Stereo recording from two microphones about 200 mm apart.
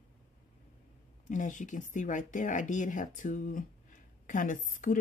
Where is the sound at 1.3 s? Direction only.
40° left (ahead or behind).